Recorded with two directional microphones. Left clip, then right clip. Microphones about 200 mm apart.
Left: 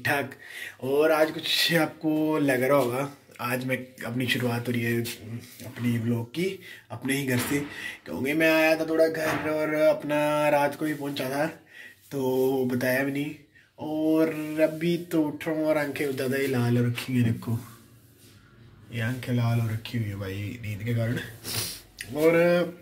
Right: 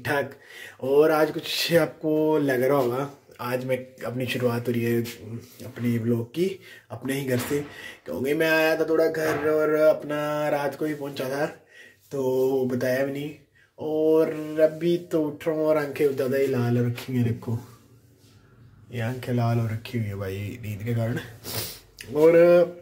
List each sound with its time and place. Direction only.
0.0 s speech: 20° right (ahead or behind)
6.0 s speech: 25° right (ahead or behind)
9.7 s a sound: 15° right (ahead or behind)
18.9 s speech: 25° right (ahead or behind)